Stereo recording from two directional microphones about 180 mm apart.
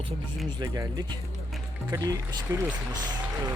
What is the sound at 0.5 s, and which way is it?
Speech, 20° right (ahead or behind).